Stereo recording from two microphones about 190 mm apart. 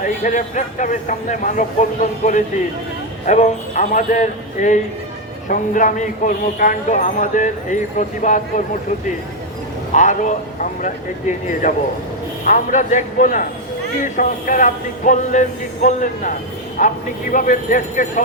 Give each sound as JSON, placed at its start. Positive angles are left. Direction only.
{"t": 0.3, "sound": "a man's voice", "side_deg": 40}
{"t": 9.9, "sound": "a man's voice", "side_deg": 40}